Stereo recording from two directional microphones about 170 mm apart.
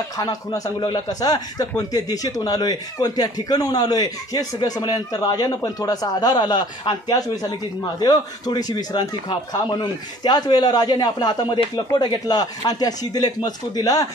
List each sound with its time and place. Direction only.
0.2 s a man's voice: 20° left (ahead or behind)